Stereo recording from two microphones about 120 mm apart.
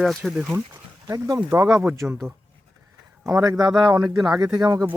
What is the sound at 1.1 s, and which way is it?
Speech, 30° right (ahead or behind).